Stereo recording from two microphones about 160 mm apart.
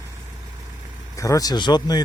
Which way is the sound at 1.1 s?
20° left (ahead or behind).